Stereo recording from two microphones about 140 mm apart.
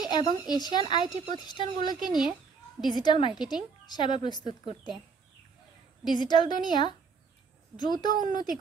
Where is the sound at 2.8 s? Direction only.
30° left (ahead or behind).